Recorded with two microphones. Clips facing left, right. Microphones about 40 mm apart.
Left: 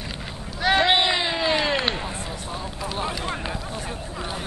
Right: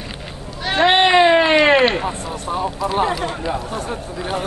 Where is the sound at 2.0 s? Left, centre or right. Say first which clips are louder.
Right 7 dB; right.